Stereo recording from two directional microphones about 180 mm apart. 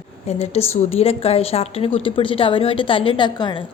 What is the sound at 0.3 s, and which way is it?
A woman's voice, 35° left (ahead or behind).